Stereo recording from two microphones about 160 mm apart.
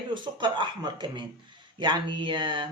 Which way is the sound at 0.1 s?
30° right (ahead or behind).